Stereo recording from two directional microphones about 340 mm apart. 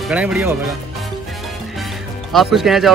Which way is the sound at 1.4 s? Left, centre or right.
Centre.